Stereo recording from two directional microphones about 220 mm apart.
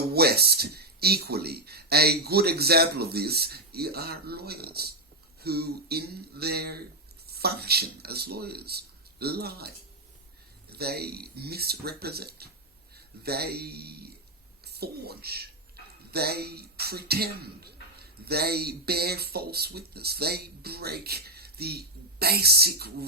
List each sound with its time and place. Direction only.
0.1 s speech: 45° right (ahead or behind)